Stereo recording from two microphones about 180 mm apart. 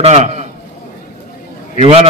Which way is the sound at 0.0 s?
35° right (ahead or behind).